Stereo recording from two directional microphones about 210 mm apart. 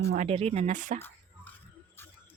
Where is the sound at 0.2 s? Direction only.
30° right (ahead or behind).